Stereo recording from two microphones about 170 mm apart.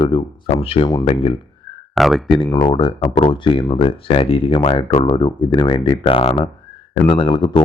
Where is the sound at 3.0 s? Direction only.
45° left (ahead or behind).